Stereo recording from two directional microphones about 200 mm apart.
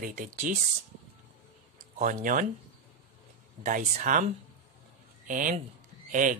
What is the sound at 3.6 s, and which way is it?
Speech, 40° right (ahead or behind).